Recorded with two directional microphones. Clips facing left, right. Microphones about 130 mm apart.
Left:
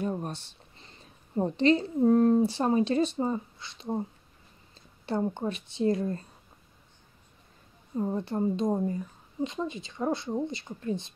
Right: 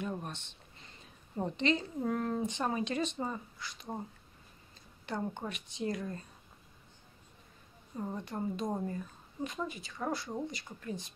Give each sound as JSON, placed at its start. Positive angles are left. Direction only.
{"t": 0.0, "sound": "speech", "side_deg": 40}
{"t": 5.0, "sound": "speech", "side_deg": 30}
{"t": 8.0, "sound": "speech", "side_deg": 25}